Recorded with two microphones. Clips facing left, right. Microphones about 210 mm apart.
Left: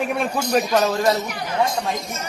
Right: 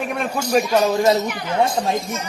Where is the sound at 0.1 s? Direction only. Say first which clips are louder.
Right 1 dB; centre (ahead or behind); by 1.8 s 30° right (ahead or behind).